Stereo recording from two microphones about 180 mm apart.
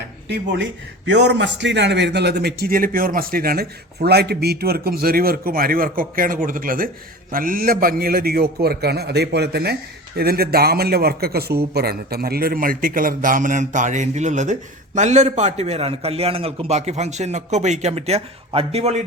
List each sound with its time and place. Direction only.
0.3 s a man's voice: 75° right (ahead or behind); by 19.0 s 35° right (ahead or behind)